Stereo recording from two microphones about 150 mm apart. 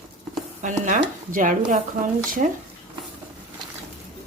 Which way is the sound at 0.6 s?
55° right (ahead or behind).